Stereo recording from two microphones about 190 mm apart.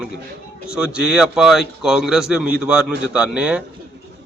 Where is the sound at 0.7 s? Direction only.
5° right (ahead or behind).